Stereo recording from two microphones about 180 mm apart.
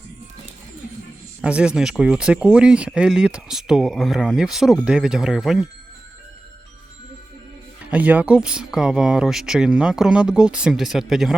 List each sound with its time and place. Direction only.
1.4 s speech: 5° right (ahead or behind)
7.9 s speech: 10° right (ahead or behind)